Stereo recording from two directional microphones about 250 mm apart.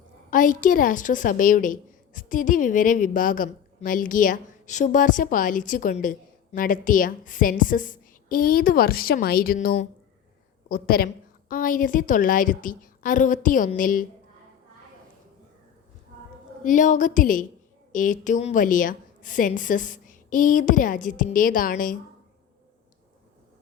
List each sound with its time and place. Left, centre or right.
0.3 s a woman's voice: left
16.6 s a woman's voice: left